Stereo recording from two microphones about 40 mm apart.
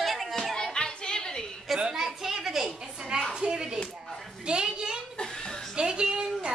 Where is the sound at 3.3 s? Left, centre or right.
Centre.